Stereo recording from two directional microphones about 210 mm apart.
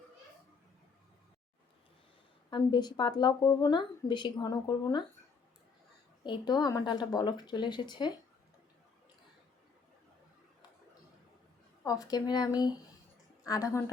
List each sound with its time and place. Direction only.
2.5 s a woman's voice: 20° left (ahead or behind)
6.2 s a woman's voice: 20° left (ahead or behind)
11.8 s speech: 15° left (ahead or behind)